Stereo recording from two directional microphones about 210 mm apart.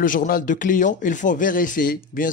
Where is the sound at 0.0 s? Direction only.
40° left (ahead or behind).